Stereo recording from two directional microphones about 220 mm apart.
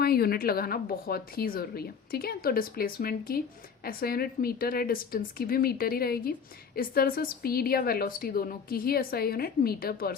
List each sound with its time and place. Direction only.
0.0 s a woman's voice: 45° left (ahead or behind)